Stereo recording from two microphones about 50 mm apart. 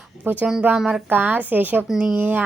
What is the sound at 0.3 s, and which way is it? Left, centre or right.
A child's voice, right.